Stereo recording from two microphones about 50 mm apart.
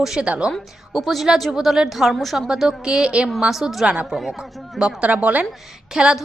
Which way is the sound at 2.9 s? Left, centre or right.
Centre.